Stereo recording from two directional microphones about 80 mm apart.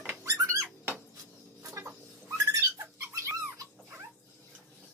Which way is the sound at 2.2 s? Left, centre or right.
Right.